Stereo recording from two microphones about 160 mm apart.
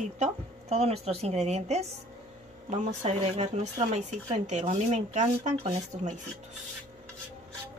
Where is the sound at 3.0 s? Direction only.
45° right (ahead or behind).